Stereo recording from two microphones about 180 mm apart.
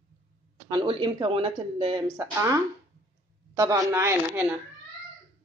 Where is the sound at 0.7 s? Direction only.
25° right (ahead or behind).